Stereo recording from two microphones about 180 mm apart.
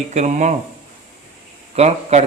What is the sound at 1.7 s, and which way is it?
Speech, 35° right (ahead or behind).